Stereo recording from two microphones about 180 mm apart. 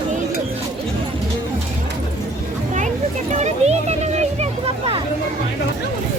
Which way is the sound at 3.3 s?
40° right (ahead or behind).